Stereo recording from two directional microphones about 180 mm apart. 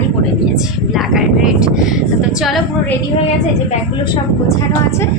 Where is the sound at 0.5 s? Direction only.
Centre (ahead or behind).